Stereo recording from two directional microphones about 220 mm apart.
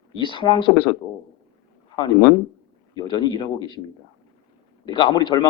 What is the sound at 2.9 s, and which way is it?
Speech, 20° left (ahead or behind).